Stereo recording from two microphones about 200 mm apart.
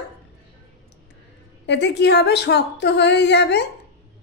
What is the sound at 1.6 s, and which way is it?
Speech, 60° left (ahead or behind).